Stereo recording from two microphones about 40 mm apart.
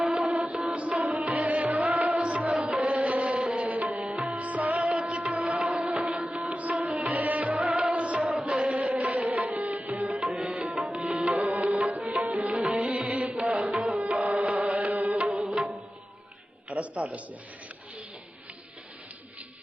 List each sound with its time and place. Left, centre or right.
0.0 s music: right
4.9 s music: right
8.8 s music: right
10.3 s tabla: right
10.9 s music: right
14.3 s music: right